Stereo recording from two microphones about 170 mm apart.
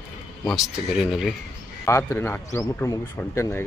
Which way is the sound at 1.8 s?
15° left (ahead or behind).